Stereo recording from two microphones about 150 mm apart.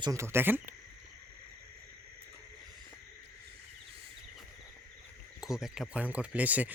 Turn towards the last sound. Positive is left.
turn(degrees=-10)  # may be behind; listen again after turning